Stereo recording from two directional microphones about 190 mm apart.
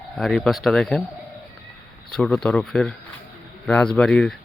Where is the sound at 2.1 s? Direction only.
5° left (ahead or behind).